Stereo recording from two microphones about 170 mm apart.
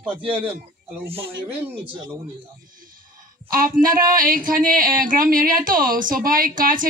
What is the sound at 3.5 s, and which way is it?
Speech, 55° right (ahead or behind).